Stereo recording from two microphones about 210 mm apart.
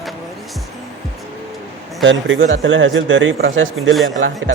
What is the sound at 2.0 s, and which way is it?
Speech, 65° right (ahead or behind).